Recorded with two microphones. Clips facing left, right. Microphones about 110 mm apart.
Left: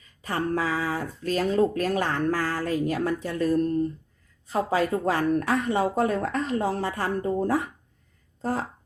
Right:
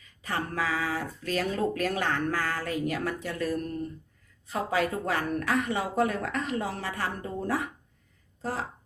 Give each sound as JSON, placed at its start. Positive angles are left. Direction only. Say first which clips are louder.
{"t": 0.0, "sound": "speech", "louder": "left 4 dB", "side_deg": 40}
{"t": 8.4, "sound": "speech", "louder": "left 5 dB", "side_deg": 45}